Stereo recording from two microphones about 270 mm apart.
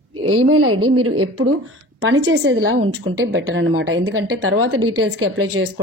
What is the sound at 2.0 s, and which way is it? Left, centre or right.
A woman's voice, right.